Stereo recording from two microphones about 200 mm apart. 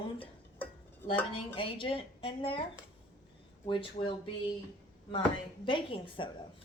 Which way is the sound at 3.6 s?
25° left (ahead or behind).